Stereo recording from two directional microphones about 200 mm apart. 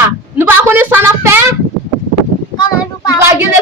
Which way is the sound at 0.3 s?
10° right (ahead or behind).